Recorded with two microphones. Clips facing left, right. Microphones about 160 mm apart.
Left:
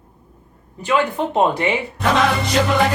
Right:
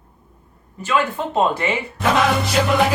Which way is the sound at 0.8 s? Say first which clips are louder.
Left 2 dB; 20° left (ahead or behind).